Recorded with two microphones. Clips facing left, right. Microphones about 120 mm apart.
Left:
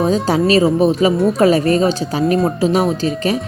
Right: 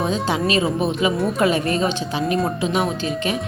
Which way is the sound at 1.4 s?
35° left (ahead or behind).